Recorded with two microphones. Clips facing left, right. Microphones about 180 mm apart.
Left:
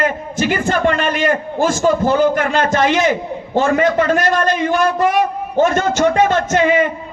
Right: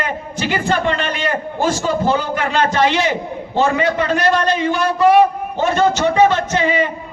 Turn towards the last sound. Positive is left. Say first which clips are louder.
# left 3 dB
turn(degrees=50)  # may be behind; listen again after turning